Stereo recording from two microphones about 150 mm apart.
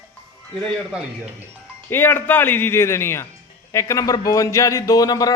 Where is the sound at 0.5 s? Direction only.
5° left (ahead or behind).